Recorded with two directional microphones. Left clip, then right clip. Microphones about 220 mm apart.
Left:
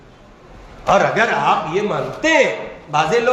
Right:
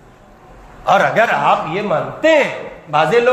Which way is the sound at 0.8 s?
45° right (ahead or behind).